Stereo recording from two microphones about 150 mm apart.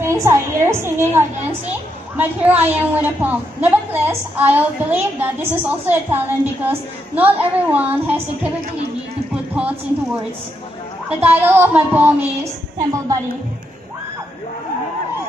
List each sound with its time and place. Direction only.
0.0 s a woman's voice: 20° right (ahead or behind)
9.3 s music: 10° right (ahead or behind)
11.1 s a woman's voice: 10° right (ahead or behind)
12.7 s a woman's voice: 20° right (ahead or behind)